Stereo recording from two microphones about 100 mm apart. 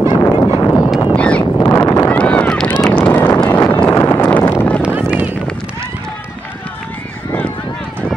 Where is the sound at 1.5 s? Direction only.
35° left (ahead or behind).